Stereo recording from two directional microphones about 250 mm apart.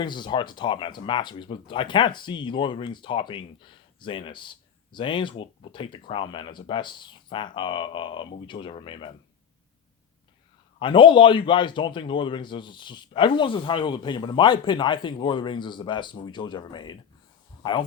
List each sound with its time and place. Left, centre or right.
0.0 s speech: centre
10.8 s speech: centre